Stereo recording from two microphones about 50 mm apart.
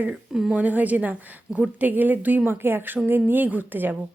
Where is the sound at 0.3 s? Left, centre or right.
Centre.